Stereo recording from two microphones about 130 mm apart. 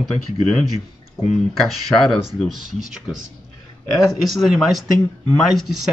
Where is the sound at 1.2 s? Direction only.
5° right (ahead or behind).